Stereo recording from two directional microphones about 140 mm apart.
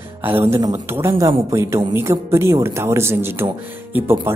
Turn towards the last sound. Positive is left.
turn(degrees=-15)  # may be behind; listen again after turning